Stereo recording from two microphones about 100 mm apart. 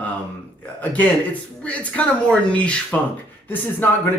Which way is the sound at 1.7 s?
10° left (ahead or behind).